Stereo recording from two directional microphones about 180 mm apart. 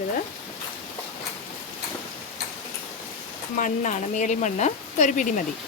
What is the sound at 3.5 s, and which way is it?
Speech, 45° left (ahead or behind).